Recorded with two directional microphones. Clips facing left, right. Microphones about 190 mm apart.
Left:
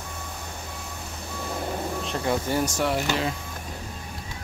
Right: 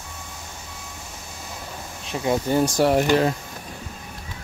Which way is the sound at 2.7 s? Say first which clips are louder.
Right 7 dB; 40° right (ahead or behind).